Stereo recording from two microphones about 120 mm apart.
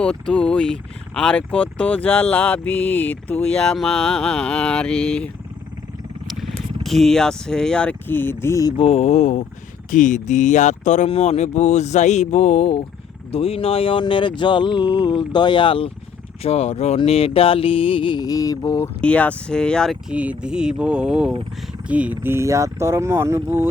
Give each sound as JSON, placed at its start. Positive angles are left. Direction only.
{"t": 0.0, "sound": "speech", "side_deg": 5}
{"t": 6.8, "sound": "speech", "side_deg": 0}
{"t": 8.8, "sound": "speech", "side_deg": 60}
{"t": 11.1, "sound": "speech", "side_deg": 60}
{"t": 13.3, "sound": "speech", "side_deg": 55}
{"t": 16.4, "sound": "speech", "side_deg": 60}
{"t": 17.0, "sound": "speech", "side_deg": 55}
{"t": 19.0, "sound": "speech", "side_deg": 10}
{"t": 20.1, "sound": "speech", "side_deg": -10}